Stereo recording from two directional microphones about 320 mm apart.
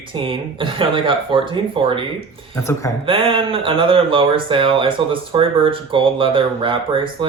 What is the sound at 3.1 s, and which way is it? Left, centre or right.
Speech, centre.